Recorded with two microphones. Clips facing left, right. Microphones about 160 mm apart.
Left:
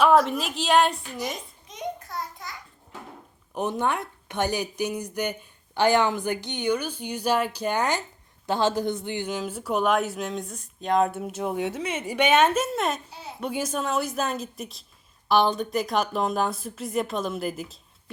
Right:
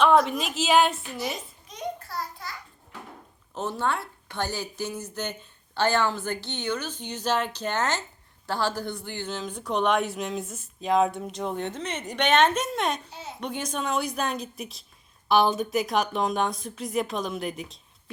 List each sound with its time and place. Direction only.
0.0 s speech: 5° left (ahead or behind)
1.6 s a sound: 20° left (ahead or behind)
3.5 s speech: 15° left (ahead or behind); by 17.7 s centre (ahead or behind)